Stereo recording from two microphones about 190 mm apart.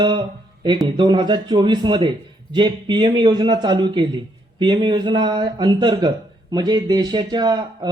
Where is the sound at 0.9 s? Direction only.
25° right (ahead or behind).